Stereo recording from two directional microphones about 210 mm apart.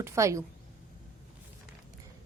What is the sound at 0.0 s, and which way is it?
Speech, 15° right (ahead or behind).